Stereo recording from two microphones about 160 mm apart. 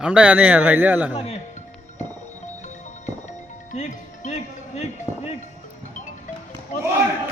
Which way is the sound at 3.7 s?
50° left (ahead or behind).